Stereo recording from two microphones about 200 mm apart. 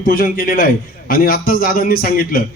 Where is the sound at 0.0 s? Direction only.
45° left (ahead or behind).